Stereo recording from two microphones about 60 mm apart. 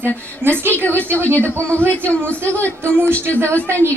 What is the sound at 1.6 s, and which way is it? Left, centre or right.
Speech, right.